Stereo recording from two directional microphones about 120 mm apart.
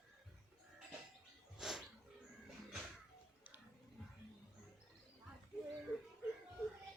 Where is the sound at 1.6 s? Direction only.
5° right (ahead or behind).